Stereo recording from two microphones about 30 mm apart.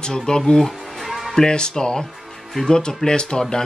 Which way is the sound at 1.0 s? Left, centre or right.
Centre.